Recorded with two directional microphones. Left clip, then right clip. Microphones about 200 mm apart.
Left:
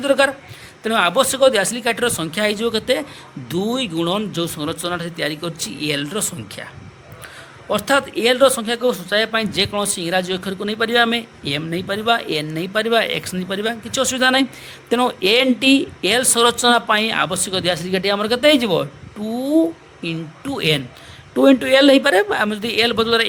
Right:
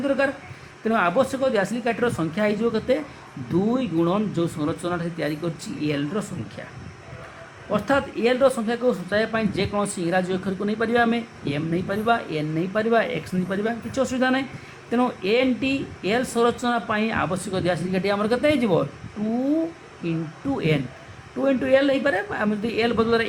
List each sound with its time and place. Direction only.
0.0 s speech: 55° left (ahead or behind)
7.7 s speech: 60° left (ahead or behind)
20.0 s speech: 50° left (ahead or behind)